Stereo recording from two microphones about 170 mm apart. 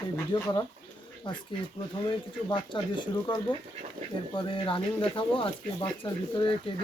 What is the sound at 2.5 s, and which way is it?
Speech, 25° left (ahead or behind).